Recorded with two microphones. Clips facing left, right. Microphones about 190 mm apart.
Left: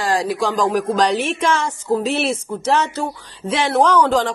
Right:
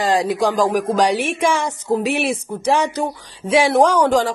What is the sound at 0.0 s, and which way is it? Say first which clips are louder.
A woman's voice: right 2 dB; 20° right (ahead or behind).